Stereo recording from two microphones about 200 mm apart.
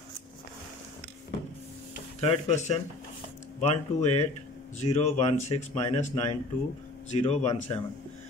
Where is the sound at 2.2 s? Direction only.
35° left (ahead or behind).